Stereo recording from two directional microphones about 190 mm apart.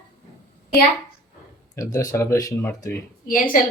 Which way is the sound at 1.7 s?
15° left (ahead or behind).